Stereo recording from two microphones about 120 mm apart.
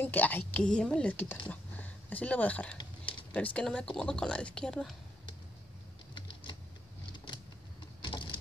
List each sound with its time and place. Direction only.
0.0 s a woman's voice: 15° left (ahead or behind)
8.0 s vehicle: 40° left (ahead or behind)